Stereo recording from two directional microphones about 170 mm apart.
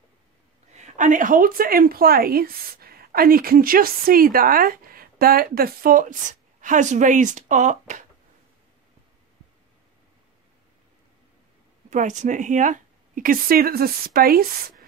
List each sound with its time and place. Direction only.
0.7 s a woman's voice: 45° right (ahead or behind)
11.9 s speech: 45° right (ahead or behind)